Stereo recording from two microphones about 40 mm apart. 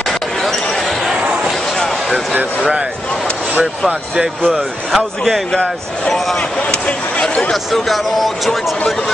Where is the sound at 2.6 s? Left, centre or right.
Right.